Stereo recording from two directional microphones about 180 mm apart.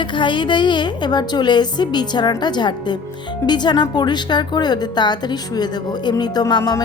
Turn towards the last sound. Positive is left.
turn(degrees=20)  # may be behind; listen again after turning